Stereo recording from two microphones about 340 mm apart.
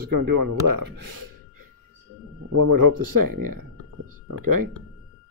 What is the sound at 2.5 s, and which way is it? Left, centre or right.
Speech, right.